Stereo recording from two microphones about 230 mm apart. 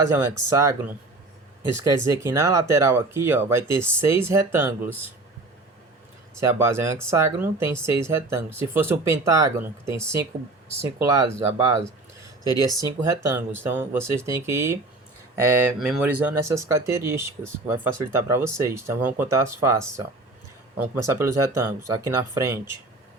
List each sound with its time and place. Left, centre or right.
0.1 s speech: centre
6.4 s speech: centre
12.5 s speech: centre
13.2 s speech: centre